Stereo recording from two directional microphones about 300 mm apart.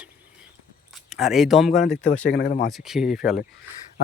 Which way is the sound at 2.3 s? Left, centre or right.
Left.